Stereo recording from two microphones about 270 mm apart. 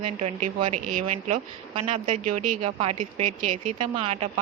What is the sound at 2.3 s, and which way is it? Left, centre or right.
Speech, right.